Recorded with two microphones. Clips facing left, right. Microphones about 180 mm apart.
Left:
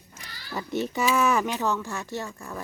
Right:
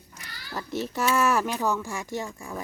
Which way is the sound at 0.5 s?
Centre (ahead or behind).